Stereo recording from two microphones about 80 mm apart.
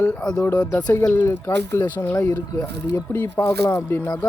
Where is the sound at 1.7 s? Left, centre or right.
Left.